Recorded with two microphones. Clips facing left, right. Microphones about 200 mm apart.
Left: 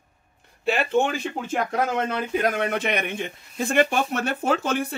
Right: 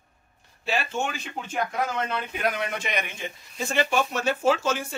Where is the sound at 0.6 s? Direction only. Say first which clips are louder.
Left 7 dB; 60° left (ahead or behind).